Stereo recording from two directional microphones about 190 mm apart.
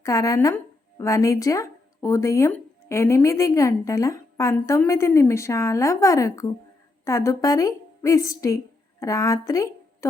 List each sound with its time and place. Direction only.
0.0 s a woman's voice: 15° left (ahead or behind)